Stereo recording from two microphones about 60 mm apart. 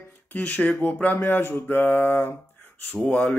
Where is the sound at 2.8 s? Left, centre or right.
Left.